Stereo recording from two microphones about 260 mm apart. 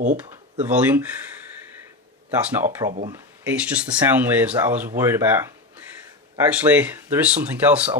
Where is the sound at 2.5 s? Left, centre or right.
Centre.